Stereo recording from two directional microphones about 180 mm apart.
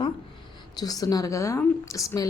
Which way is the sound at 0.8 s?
20° left (ahead or behind).